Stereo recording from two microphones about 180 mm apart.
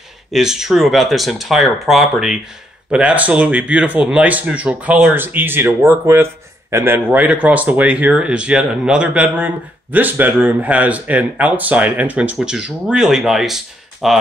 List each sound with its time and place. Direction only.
0.3 s speech: 5° right (ahead or behind)